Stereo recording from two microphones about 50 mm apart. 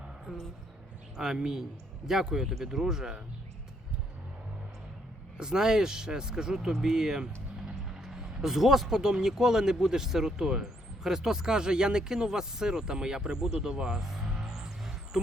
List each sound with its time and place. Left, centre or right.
0.3 s a woman's voice: centre
5.4 s speech: centre